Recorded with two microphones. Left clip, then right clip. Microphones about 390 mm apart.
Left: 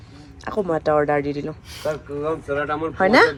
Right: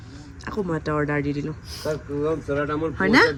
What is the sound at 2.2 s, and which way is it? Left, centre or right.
Speech, left.